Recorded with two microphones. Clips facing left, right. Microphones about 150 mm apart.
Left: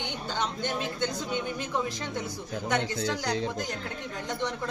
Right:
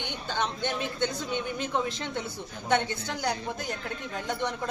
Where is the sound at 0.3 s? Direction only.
20° right (ahead or behind).